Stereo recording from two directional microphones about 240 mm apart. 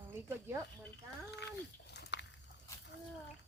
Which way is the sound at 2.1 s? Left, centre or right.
Left.